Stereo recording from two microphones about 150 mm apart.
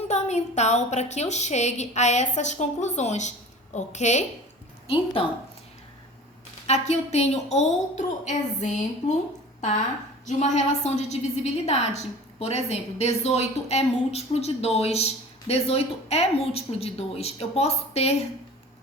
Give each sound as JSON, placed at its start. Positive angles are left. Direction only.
{"t": 0.1, "sound": "a woman's voice", "side_deg": 45}
{"t": 6.7, "sound": "a woman's voice", "side_deg": 50}